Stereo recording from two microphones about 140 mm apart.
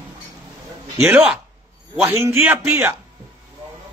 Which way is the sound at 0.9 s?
10° right (ahead or behind).